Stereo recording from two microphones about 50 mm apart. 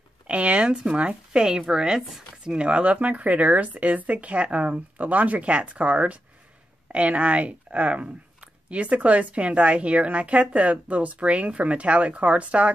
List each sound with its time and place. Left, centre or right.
0.3 s a woman's voice: right